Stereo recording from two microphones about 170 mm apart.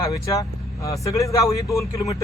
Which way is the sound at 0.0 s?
20° left (ahead or behind).